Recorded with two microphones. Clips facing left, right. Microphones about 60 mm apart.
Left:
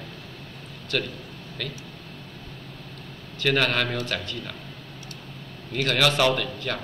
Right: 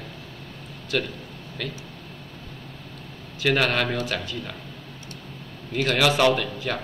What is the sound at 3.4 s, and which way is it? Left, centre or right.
Speech, centre.